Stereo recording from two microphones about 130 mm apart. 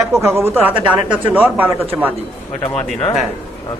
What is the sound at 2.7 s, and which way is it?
Speech, 10° left (ahead or behind).